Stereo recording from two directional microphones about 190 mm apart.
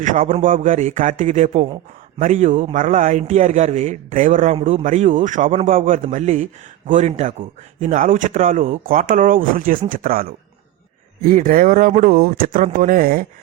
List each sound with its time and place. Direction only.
0.0 s a man's voice: 45° right (ahead or behind)